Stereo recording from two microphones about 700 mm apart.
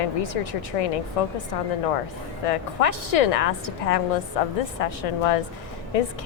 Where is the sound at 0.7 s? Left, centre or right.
Left.